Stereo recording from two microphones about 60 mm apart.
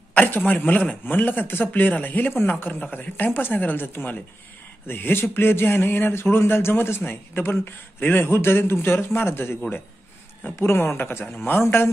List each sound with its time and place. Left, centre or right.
0.1 s a man's voice: left